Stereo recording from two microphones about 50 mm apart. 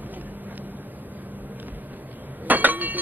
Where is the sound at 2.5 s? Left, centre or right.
Right.